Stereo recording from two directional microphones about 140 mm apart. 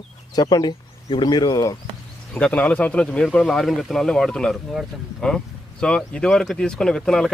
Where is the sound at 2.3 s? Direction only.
10° left (ahead or behind).